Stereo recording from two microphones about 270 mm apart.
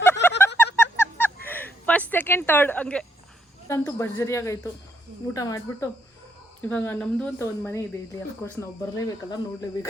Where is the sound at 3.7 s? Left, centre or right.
Centre.